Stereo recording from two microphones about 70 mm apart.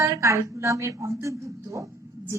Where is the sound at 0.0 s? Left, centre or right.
Right.